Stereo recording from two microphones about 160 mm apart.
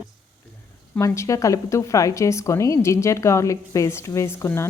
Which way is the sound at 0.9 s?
20° left (ahead or behind).